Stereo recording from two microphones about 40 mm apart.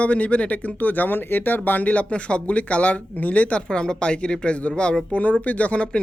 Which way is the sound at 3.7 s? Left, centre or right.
Left.